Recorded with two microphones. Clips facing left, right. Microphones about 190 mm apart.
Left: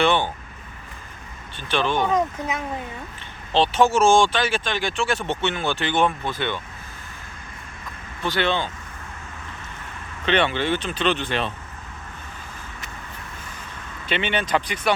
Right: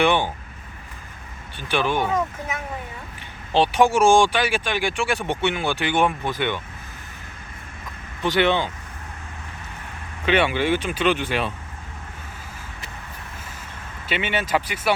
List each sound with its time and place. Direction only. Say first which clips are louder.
0.0 s speech: right 1 dB; 15° right (ahead or behind)
1.5 s speech: even; 10° right (ahead or behind)
3.5 s speech: right 1 dB; 15° right (ahead or behind)
8.2 s speech: right 3 dB; 15° right (ahead or behind)
10.2 s speech: right 1 dB; 10° right (ahead or behind)
14.1 s speech: even; 5° right (ahead or behind)